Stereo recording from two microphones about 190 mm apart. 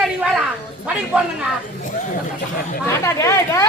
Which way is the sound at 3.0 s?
15° left (ahead or behind).